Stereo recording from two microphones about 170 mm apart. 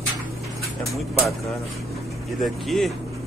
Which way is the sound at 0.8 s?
Centre (ahead or behind).